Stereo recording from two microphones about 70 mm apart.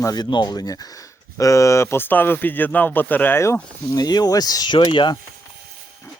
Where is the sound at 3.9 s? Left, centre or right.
Left.